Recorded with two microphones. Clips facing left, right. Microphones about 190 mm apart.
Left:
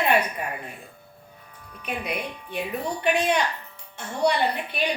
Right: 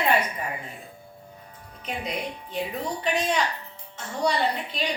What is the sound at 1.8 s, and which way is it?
Speech, 60° left (ahead or behind).